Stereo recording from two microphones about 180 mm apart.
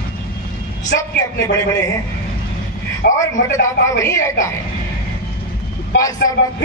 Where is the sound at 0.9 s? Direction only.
65° left (ahead or behind).